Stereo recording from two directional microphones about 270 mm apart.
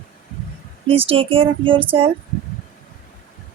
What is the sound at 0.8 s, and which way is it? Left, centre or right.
A woman's voice, right.